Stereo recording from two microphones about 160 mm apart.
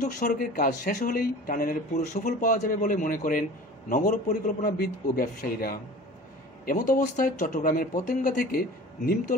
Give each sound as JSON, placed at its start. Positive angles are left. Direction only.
{"t": 0.0, "sound": "speech", "side_deg": 60}